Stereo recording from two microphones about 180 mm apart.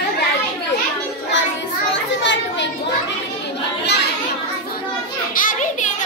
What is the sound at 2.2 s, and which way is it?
Children playing, 85° left.